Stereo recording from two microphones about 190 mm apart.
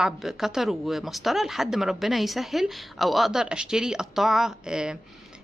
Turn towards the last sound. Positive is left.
turn(degrees=-5)  # may be behind; listen again after turning